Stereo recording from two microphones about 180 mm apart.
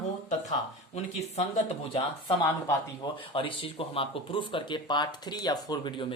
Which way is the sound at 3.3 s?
30° left (ahead or behind).